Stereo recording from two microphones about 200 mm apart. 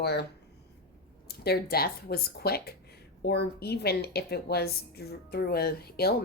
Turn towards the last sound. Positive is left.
turn(degrees=50)  # may be behind; listen again after turning